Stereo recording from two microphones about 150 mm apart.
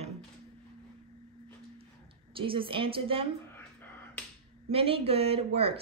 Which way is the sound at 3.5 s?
15° left (ahead or behind).